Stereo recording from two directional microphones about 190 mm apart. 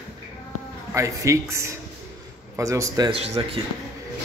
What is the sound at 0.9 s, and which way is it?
A man's voice, 15° right (ahead or behind).